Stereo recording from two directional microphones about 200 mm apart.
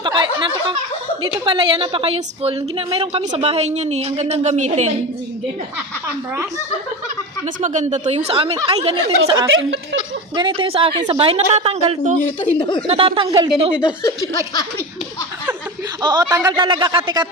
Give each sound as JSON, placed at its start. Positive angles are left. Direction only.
{"t": 0.0, "sound": "a sound", "side_deg": -20}
{"t": 1.5, "sound": "a woman's voice", "side_deg": -25}
{"t": 7.6, "sound": "a woman's voice", "side_deg": -35}
{"t": 9.5, "sound": "speech", "side_deg": -75}
{"t": 10.3, "sound": "a woman's voice", "side_deg": -25}
{"t": 12.5, "sound": "laughter", "side_deg": 25}
{"t": 12.9, "sound": "a woman's voice", "side_deg": -25}
{"t": 14.0, "sound": "laughter", "side_deg": 20}
{"t": 16.0, "sound": "a woman's voice", "side_deg": -20}